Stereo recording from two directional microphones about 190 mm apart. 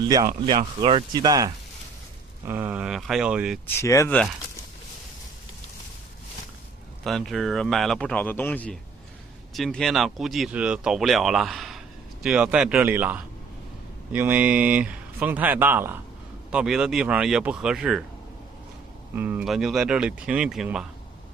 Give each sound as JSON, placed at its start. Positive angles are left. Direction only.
{"t": 0.8, "sound": "speech", "side_deg": -25}
{"t": 3.8, "sound": "speech", "side_deg": 15}
{"t": 7.0, "sound": "speech", "side_deg": 0}
{"t": 19.1, "sound": "speech", "side_deg": -10}